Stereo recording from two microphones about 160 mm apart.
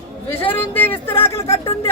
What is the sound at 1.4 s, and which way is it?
Speech, 35° left (ahead or behind).